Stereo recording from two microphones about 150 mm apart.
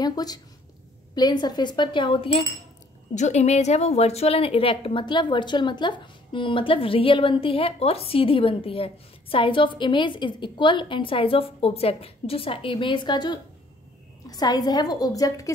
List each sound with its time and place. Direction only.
0.0 s speech: 25° left (ahead or behind)
3.2 s a woman's voice: 50° left (ahead or behind); by 15.5 s 25° left (ahead or behind)